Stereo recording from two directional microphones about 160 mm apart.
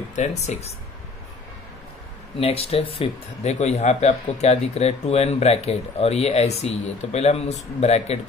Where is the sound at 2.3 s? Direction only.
40° left (ahead or behind).